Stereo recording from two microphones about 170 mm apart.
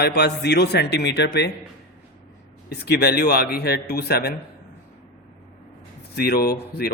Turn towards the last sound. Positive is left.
turn(degrees=65)  # may be behind; listen again after turning